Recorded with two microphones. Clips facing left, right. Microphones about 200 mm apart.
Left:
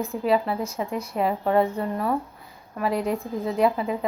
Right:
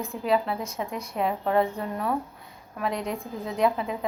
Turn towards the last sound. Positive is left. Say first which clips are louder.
# left 3 dB
turn(degrees=0)  # may be behind; listen again after turning